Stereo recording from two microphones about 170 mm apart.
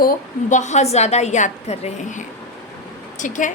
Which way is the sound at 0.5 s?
45° left (ahead or behind).